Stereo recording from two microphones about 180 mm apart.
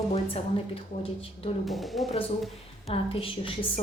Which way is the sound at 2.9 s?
30° left (ahead or behind).